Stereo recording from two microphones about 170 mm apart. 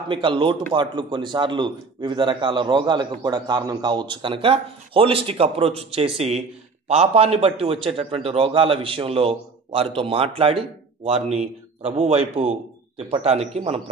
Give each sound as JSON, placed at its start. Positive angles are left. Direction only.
{"t": 0.1, "sound": "a man's voice", "side_deg": -30}